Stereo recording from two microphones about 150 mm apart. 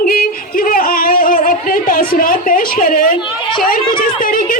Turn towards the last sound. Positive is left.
turn(degrees=70)  # may be behind; listen again after turning